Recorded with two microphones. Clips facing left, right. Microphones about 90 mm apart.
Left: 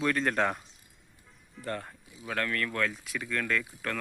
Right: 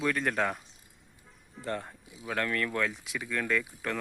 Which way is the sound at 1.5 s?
20° right (ahead or behind).